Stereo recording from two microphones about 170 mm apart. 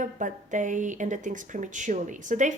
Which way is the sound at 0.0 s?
50° right (ahead or behind).